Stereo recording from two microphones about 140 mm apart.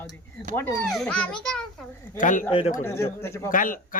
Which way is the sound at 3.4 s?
75° left (ahead or behind).